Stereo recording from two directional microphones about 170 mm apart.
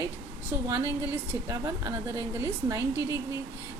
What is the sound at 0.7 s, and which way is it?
A woman's voice, 15° right (ahead or behind).